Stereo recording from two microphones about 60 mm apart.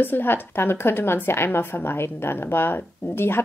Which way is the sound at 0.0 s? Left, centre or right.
Left.